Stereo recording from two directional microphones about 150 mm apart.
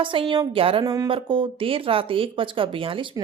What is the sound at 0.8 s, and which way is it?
Speech, 25° right (ahead or behind).